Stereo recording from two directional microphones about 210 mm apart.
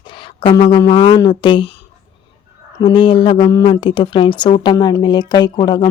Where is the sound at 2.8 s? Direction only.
20° left (ahead or behind).